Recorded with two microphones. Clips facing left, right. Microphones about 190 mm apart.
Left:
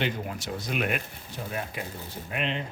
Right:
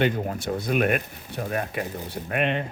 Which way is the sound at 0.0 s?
55° right (ahead or behind).